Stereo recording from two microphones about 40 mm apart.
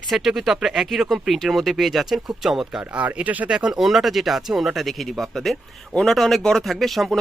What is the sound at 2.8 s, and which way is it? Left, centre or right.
Speech, right.